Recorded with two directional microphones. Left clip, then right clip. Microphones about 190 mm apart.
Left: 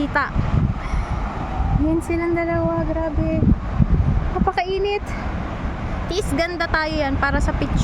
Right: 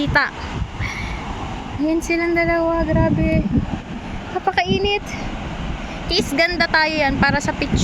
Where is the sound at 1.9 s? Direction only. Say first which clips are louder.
Right 3 dB; centre (ahead or behind).